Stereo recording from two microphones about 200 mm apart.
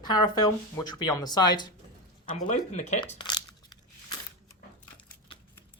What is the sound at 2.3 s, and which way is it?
Speech, 35° left (ahead or behind).